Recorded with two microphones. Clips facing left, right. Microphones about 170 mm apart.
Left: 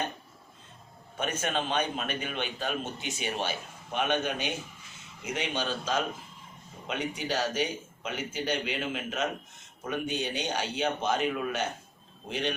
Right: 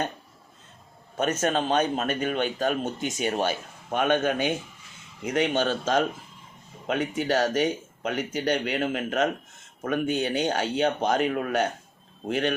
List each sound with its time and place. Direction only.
1.1 s a man's voice: 40° right (ahead or behind)